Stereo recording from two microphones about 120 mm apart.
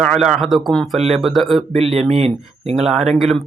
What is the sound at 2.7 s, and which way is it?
Speech, 5° right (ahead or behind).